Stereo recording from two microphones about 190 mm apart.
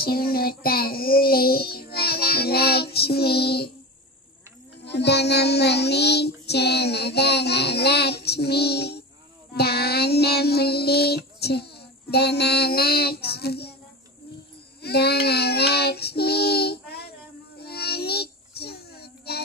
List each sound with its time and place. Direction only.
0.0 s child singing: 55° left (ahead or behind)
4.8 s child singing: 60° left (ahead or behind)
14.8 s child singing: 60° left (ahead or behind)